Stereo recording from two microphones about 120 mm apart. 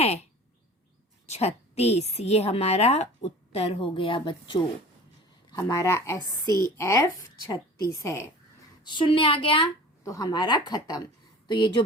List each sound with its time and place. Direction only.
0.0 s a sound: 60° left (ahead or behind)
1.3 s a woman's voice: 60° left (ahead or behind); by 4.6 s 45° left (ahead or behind)
5.5 s a woman's voice: 35° left (ahead or behind)
8.8 s a woman's voice: 40° left (ahead or behind)
10.0 s a woman's voice: 30° left (ahead or behind)